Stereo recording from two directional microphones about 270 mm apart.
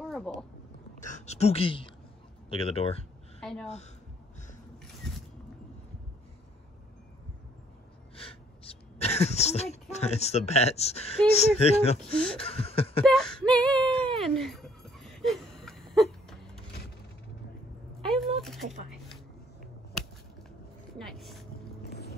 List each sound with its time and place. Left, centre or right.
0.0 s a sound: centre
1.0 s speech: left
3.3 s a sound: centre
8.3 s speech: left
12.4 s chuckle: left
13.0 s speech: centre
14.2 s a sound: centre
18.0 s speech: centre
21.0 s boat: centre
21.8 s boat: left